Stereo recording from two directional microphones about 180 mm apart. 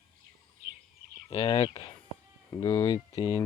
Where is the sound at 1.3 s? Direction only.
35° left (ahead or behind).